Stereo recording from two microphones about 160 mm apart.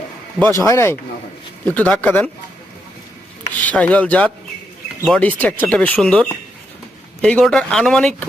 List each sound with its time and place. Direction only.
0.6 s speech: 20° left (ahead or behind)
3.6 s speech: 10° left (ahead or behind)